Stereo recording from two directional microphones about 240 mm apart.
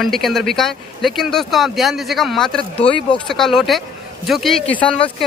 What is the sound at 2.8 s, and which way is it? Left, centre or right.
Speech, left.